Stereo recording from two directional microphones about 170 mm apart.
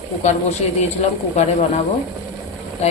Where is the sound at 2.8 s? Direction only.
40° left (ahead or behind).